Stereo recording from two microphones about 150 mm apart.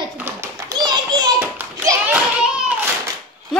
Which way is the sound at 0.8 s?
25° right (ahead or behind).